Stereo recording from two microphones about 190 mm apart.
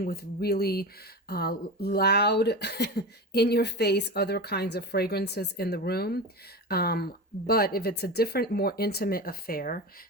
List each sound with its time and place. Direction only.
0.0 s speech: 55° left (ahead or behind)